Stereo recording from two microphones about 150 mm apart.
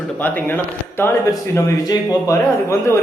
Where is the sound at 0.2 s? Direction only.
10° left (ahead or behind).